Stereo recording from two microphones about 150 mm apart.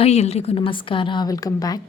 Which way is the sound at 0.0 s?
45° left (ahead or behind).